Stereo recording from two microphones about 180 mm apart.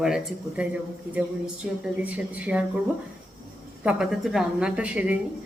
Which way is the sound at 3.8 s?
5° right (ahead or behind).